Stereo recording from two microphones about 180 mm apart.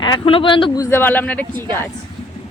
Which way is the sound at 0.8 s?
10° left (ahead or behind).